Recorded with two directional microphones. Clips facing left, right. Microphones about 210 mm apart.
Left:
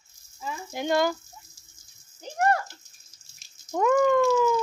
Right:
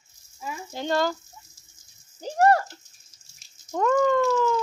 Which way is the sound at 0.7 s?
15° left (ahead or behind).